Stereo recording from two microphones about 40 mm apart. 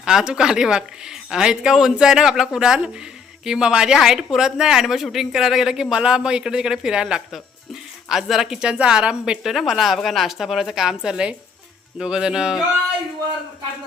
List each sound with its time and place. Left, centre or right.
0.0 s speech: centre
8.1 s speech: centre
8.6 s a woman's voice: right
9.4 s a woman's voice: centre